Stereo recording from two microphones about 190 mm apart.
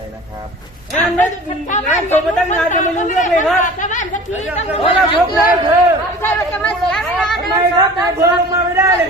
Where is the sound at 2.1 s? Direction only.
40° left (ahead or behind).